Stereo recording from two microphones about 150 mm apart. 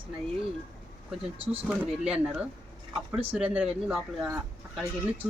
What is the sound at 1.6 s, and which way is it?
A woman's voice, 5° right (ahead or behind).